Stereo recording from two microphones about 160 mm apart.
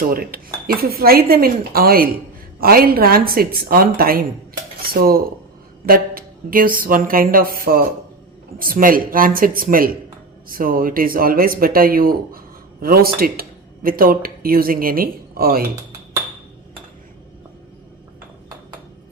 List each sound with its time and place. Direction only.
0.0 s speech: 65° right (ahead or behind)
4.8 s cutlery: 70° right (ahead or behind)
5.8 s speech: 65° right (ahead or behind)